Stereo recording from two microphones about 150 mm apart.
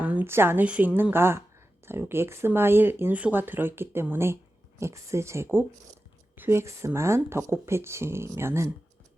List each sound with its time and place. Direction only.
0.0 s a woman's voice: 10° right (ahead or behind)